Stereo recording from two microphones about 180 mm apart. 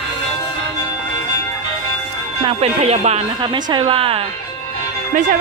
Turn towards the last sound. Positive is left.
turn(degrees=-45)  # may be behind; listen again after turning